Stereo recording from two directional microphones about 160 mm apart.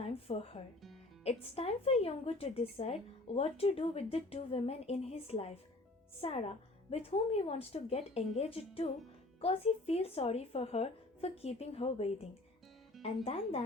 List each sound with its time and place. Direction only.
0.0 s speech: 40° left (ahead or behind)
13.2 s speech: 40° left (ahead or behind)